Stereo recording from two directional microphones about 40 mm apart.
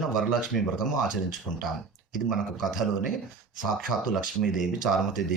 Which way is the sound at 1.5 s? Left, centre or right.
Centre.